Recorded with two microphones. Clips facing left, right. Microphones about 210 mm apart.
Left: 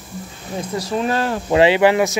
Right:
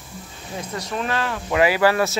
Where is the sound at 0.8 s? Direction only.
35° left (ahead or behind).